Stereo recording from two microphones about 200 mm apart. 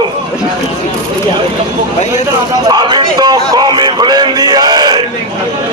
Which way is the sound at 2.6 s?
20° right (ahead or behind).